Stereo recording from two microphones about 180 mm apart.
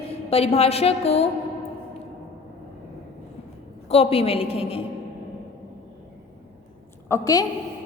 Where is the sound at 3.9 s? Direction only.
35° left (ahead or behind).